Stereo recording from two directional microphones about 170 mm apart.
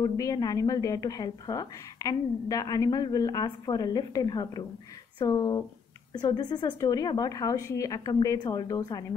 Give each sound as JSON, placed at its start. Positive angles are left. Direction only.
{"t": 0.0, "sound": "a woman's voice", "side_deg": 20}